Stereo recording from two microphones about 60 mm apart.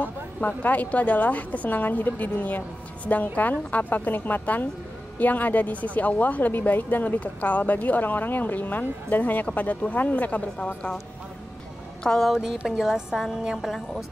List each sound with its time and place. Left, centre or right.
0.4 s speech: left
12.0 s speech: centre
12.3 s a woman's voice: centre